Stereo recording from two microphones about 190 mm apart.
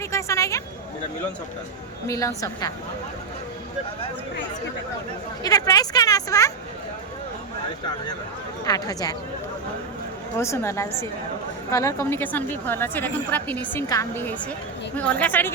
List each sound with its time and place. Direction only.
0.1 s a sound: 15° left (ahead or behind)
2.0 s a woman's voice: 15° left (ahead or behind)
5.4 s speech: 20° left (ahead or behind)
8.6 s speech: 20° left (ahead or behind)
10.3 s a woman's voice: 15° left (ahead or behind)